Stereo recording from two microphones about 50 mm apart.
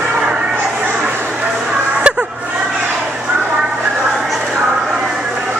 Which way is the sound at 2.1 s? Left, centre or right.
Right.